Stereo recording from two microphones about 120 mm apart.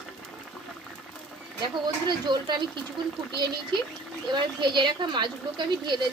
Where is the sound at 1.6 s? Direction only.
40° right (ahead or behind).